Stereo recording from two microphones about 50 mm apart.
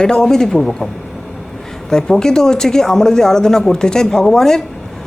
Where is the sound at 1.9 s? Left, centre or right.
Centre.